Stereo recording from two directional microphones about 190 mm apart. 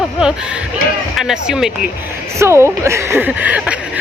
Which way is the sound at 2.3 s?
15° right (ahead or behind).